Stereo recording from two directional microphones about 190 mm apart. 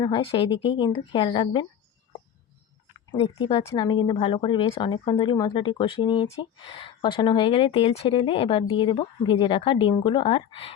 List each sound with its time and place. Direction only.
0.0 s speech: 25° left (ahead or behind)
3.1 s speech: 25° left (ahead or behind)